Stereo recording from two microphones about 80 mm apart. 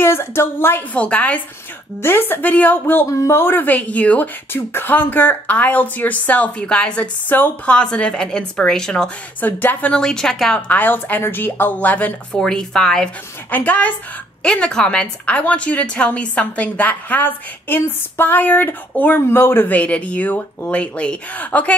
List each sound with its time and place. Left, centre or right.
0.0 s a woman's voice: left
0.9 s a woman's voice: centre
2.0 s speech: left
3.1 s speech: left; by 9.1 s centre
9.4 s a woman's voice: left; by 10.6 s centre
10.7 s speech: left
12.3 s a woman's voice: centre
13.5 s a woman's voice: centre